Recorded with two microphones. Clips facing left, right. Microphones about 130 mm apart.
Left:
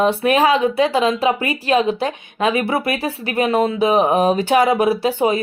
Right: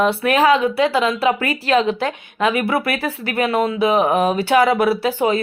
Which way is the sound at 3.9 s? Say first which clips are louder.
Left 2 dB; 20° left (ahead or behind).